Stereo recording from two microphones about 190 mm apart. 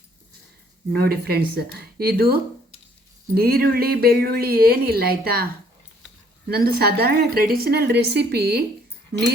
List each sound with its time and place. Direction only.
0.9 s speech: 55° right (ahead or behind)
6.5 s a woman's voice: 55° right (ahead or behind)